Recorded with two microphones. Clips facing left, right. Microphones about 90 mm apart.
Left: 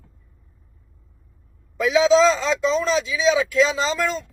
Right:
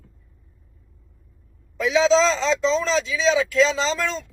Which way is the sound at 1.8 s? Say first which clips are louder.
Left 2 dB; 5° left (ahead or behind).